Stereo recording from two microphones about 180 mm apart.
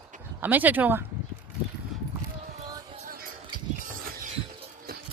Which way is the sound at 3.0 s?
55° right (ahead or behind).